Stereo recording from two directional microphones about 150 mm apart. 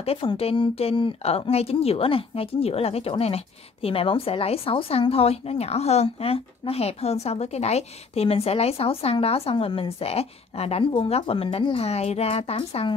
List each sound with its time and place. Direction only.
0.0 s speech: 40° left (ahead or behind)